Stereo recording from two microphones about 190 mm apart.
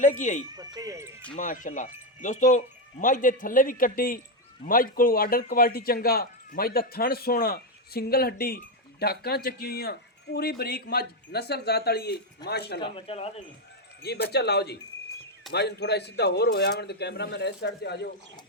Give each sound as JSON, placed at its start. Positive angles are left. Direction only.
{"t": 0.0, "sound": "speech", "side_deg": 40}
{"t": 0.5, "sound": "speech", "side_deg": -20}
{"t": 1.4, "sound": "a man's voice", "side_deg": 45}
{"t": 12.8, "sound": "speech", "side_deg": 30}
{"t": 14.3, "sound": "a man's voice", "side_deg": 60}